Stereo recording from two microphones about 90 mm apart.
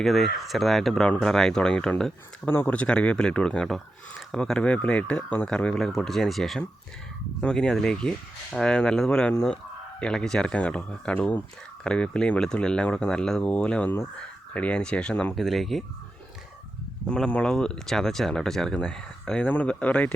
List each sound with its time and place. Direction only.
0.0 s speech: centre (ahead or behind)
2.5 s speech: 20° left (ahead or behind)
15.4 s speech: centre (ahead or behind)
17.1 s speech: 10° left (ahead or behind)